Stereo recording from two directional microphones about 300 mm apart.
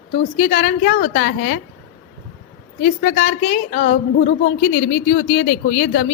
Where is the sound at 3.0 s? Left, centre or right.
Left.